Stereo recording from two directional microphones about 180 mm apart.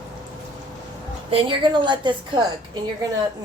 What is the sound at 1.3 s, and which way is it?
A woman's voice, 25° right (ahead or behind).